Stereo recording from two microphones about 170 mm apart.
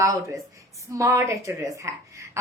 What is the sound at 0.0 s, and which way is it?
A woman's voice, 20° right (ahead or behind).